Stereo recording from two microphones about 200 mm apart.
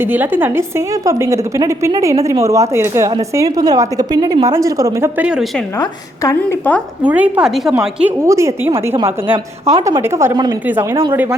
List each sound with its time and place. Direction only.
0.0 s a woman's voice: 10° right (ahead or behind)
5.7 s a woman's voice: 15° left (ahead or behind)
7.0 s a woman's voice: 5° right (ahead or behind)